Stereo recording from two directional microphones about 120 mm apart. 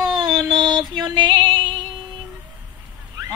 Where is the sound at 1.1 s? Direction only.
40° right (ahead or behind).